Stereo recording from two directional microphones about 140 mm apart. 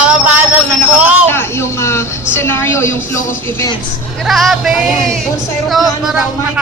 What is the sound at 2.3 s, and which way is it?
Speech, 15° left (ahead or behind).